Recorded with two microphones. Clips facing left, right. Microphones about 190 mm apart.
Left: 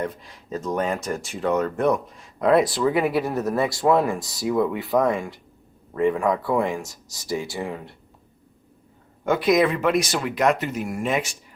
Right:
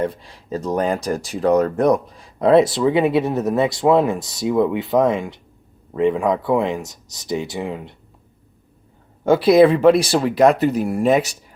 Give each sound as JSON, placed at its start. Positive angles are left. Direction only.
{"t": 0.0, "sound": "speech", "side_deg": -30}
{"t": 9.2, "sound": "speech", "side_deg": -30}